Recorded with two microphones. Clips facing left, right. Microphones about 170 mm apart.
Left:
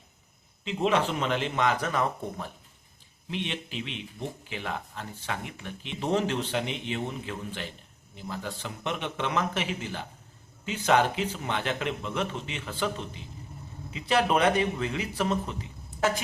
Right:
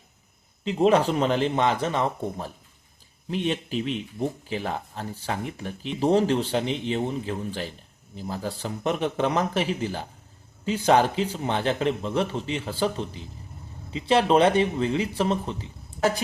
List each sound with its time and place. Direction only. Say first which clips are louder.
0.6 s speech: right 6 dB; 40° right (ahead or behind)